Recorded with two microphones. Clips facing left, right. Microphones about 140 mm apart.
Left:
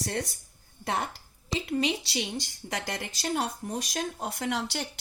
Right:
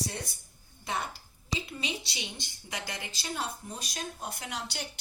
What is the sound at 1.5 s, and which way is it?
A woman's voice, 90° left.